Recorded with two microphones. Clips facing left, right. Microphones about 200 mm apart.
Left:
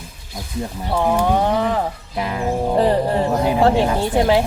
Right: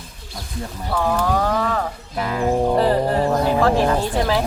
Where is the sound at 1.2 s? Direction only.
25° left (ahead or behind).